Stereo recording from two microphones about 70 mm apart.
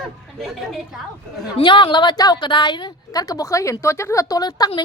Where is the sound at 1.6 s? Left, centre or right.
Left.